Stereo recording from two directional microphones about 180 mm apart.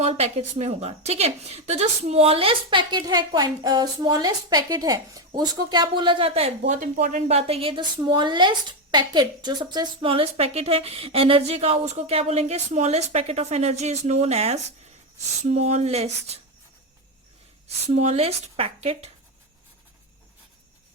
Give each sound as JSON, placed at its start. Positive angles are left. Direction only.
{"t": 0.0, "sound": "a woman's voice", "side_deg": -35}
{"t": 17.8, "sound": "a woman's voice", "side_deg": -35}